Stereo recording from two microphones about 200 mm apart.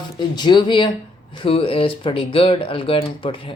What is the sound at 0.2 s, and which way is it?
Speech, 20° left (ahead or behind).